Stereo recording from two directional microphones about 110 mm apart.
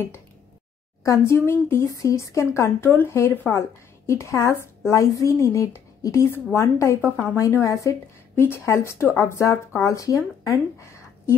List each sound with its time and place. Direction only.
1.0 s speech: 30° left (ahead or behind)